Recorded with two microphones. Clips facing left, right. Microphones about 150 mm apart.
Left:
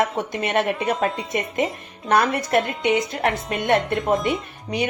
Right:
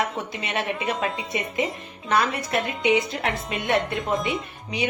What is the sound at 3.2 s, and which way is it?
Speech, 45° left (ahead or behind).